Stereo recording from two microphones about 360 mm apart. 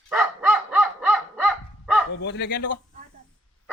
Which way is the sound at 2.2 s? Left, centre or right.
Left.